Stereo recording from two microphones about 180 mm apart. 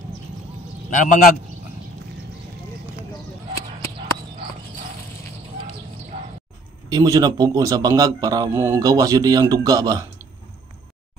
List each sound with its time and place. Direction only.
0.9 s a man's voice: 45° left (ahead or behind)
6.1 s music: 45° right (ahead or behind)
6.9 s a man's voice: 20° right (ahead or behind)